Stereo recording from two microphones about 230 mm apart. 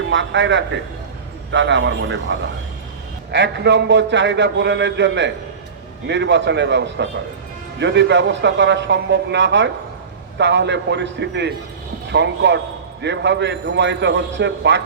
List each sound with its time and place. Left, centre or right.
0.1 s a man's voice: right
3.3 s a man's voice: right